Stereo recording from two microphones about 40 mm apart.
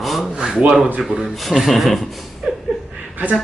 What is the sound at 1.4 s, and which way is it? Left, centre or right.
Speech, centre.